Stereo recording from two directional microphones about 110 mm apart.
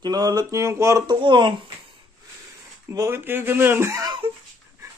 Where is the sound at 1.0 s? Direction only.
45° right (ahead or behind).